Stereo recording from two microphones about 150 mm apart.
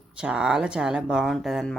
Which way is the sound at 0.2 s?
5° right (ahead or behind).